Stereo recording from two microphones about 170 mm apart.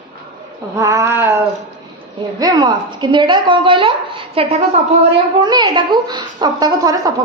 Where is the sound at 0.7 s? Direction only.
20° right (ahead or behind).